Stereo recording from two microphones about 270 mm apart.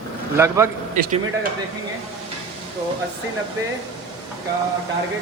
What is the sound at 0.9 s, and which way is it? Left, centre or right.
Speech, right.